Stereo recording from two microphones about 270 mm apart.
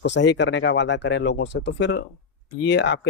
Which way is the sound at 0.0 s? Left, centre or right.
Left.